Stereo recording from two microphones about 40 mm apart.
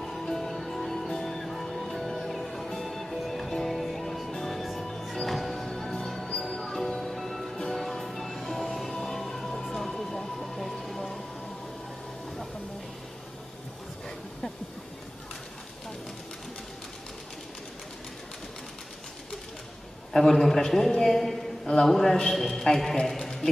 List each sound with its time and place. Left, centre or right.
0.0 s music: centre
20.1 s a man's voice: centre